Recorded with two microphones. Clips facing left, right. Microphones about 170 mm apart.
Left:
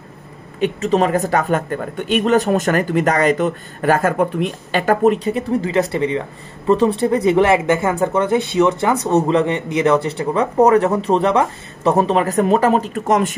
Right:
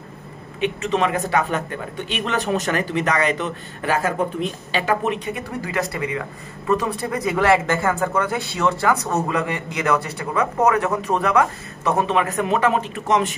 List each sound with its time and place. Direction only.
0.6 s a man's voice: 40° left (ahead or behind)